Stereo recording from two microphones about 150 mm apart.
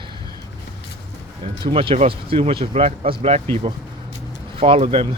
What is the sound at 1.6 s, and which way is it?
Speech, 35° right (ahead or behind).